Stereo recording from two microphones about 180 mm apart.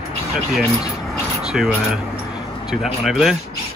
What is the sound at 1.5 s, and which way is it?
Speech, centre (ahead or behind).